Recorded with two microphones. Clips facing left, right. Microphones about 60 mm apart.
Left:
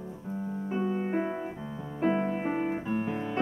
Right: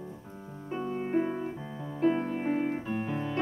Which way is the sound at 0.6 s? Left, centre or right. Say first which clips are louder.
Left 2 dB; centre.